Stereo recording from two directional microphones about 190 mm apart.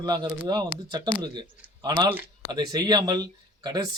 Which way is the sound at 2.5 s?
20° right (ahead or behind).